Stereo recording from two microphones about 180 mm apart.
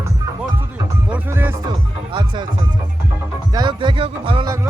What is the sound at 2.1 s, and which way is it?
Music, 25° right (ahead or behind).